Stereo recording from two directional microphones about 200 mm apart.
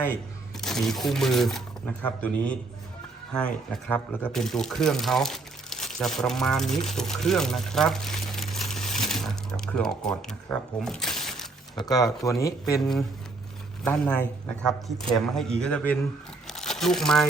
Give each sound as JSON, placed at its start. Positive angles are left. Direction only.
{"t": 0.6, "sound": "speech", "side_deg": 0}
{"t": 10.8, "sound": "a sound", "side_deg": 0}
{"t": 11.8, "sound": "speech", "side_deg": 20}
{"t": 13.8, "sound": "speech", "side_deg": 5}
{"t": 15.4, "sound": "speech", "side_deg": 5}
{"t": 16.5, "sound": "crumpling", "side_deg": 0}